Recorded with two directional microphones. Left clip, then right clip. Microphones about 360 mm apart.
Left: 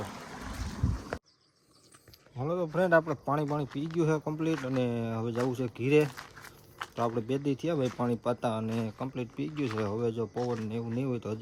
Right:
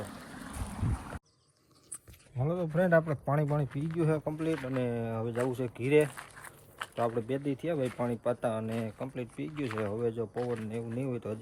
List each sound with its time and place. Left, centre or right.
0.1 s boat: centre
2.4 s speech: centre